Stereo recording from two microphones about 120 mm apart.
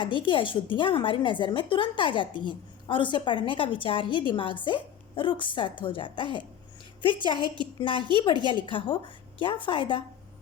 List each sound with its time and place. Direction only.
0.0 s speech: 45° left (ahead or behind)